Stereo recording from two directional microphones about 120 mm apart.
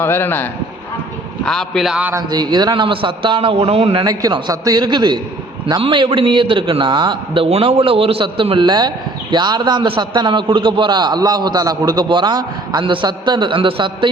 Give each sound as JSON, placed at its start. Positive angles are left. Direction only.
{"t": 0.0, "sound": "speech", "side_deg": 15}
{"t": 1.5, "sound": "a man's voice", "side_deg": 5}
{"t": 2.1, "sound": "a man's voice", "side_deg": -35}
{"t": 4.0, "sound": "a man's voice", "side_deg": -30}
{"t": 7.4, "sound": "a man's voice", "side_deg": -55}